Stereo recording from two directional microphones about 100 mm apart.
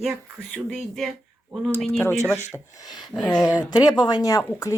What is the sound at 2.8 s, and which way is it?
Speech, 40° left (ahead or behind).